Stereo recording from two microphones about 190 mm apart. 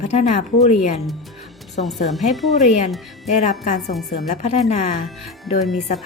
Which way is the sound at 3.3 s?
40° left (ahead or behind).